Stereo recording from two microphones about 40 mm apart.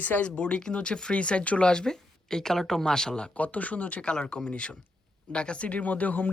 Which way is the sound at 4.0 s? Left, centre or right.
Left.